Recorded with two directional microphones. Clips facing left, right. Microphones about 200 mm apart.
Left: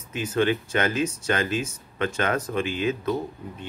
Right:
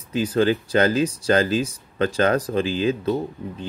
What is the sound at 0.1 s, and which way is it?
Speech, 35° right (ahead or behind).